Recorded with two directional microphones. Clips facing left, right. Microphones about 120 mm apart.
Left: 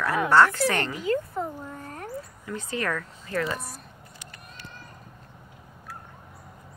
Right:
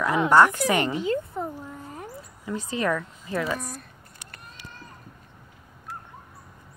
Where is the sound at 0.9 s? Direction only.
25° right (ahead or behind).